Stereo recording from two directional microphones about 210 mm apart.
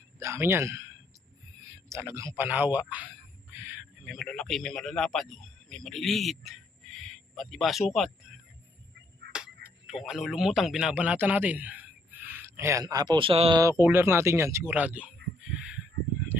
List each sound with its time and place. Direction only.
0.2 s speech: 15° right (ahead or behind)
1.9 s speech: 10° right (ahead or behind)
9.3 s speech: 5° right (ahead or behind); by 13.6 s 25° right (ahead or behind)
13.6 s speech: 15° right (ahead or behind)